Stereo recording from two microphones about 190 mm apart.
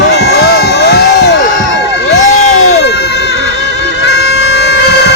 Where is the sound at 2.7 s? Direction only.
60° left (ahead or behind).